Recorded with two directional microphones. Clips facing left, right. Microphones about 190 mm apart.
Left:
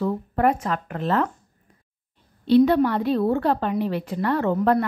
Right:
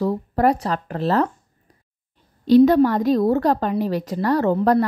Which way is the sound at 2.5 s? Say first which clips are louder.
Right 4 dB; 40° right (ahead or behind).